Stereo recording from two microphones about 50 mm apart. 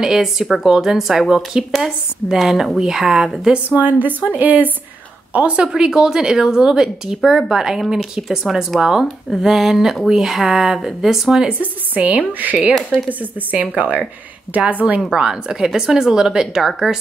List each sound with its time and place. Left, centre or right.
0.0 s speech: centre
3.7 s a woman's voice: right
5.3 s a woman's voice: right
5.7 s speech: centre
11.6 s a woman's voice: right
13.5 s a woman's voice: right
15.0 s speech: centre